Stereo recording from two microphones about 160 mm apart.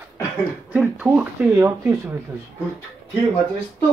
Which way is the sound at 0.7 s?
10° right (ahead or behind).